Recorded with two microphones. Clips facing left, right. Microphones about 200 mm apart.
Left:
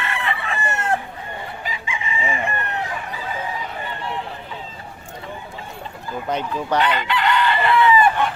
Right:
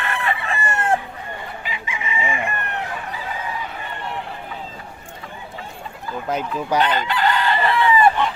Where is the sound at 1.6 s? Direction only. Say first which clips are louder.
Left 1 dB; 35° left (ahead or behind).